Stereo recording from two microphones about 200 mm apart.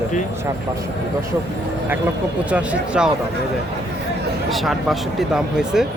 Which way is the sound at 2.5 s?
5° right (ahead or behind).